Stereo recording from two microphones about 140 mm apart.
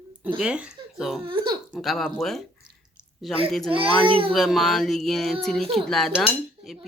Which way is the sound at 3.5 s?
5° left (ahead or behind).